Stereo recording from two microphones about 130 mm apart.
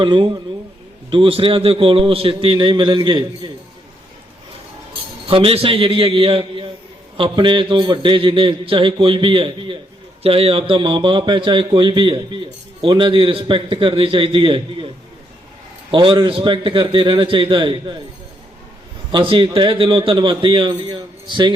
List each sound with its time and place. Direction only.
0.0 s a man's voice: 40° right (ahead or behind)
5.3 s a man's voice: 45° right (ahead or behind)
15.9 s a man's voice: 40° right (ahead or behind)
19.1 s a man's voice: 40° right (ahead or behind)